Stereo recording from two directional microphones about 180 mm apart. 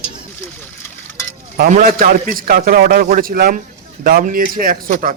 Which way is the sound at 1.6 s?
50° right (ahead or behind).